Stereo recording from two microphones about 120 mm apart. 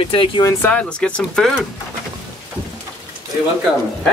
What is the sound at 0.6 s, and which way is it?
Speech, 10° left (ahead or behind).